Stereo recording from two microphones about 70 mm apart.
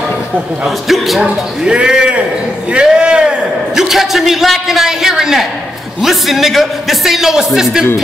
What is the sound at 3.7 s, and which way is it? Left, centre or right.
A man's voice, centre.